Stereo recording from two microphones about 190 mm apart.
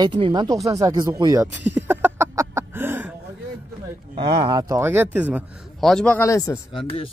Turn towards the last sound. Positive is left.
turn(degrees=30)  # may be behind; listen again after turning